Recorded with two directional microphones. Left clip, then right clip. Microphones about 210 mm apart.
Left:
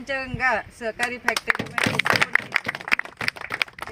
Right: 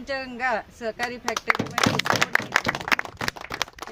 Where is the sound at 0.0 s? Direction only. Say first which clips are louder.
Left 3 dB; 10° right (ahead or behind).